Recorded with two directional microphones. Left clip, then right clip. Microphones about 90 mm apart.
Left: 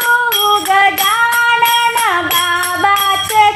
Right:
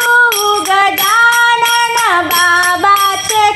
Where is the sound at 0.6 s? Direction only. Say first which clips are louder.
Right 1 dB; 15° right (ahead or behind).